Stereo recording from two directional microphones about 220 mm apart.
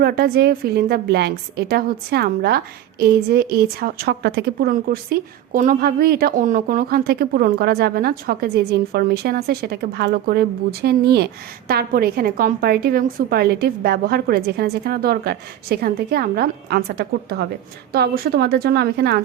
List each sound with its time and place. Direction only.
0.0 s a woman's voice: 45° right (ahead or behind)